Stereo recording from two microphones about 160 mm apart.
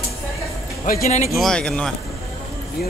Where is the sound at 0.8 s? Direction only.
55° left (ahead or behind).